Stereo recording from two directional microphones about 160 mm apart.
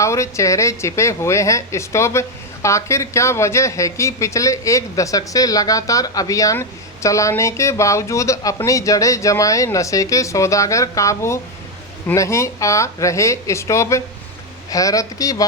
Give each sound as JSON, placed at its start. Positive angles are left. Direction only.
{"t": 0.0, "sound": "a woman's voice", "side_deg": 20}